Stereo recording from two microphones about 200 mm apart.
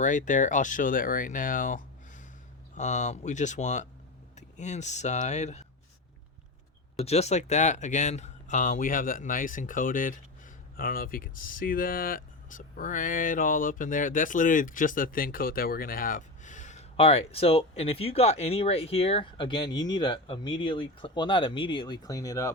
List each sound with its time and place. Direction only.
0.0 s speech: 40° left (ahead or behind)
7.0 s speech: 30° left (ahead or behind); by 22.5 s 15° left (ahead or behind)